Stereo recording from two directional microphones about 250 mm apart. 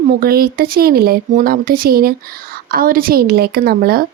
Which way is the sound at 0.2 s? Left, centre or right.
Right.